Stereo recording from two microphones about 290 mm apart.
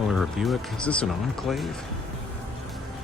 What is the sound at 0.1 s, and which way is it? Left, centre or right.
Speech, centre.